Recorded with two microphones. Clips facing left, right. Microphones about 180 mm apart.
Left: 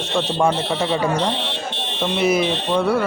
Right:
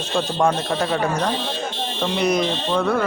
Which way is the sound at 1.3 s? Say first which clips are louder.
Right 1 dB; 65° left (ahead or behind).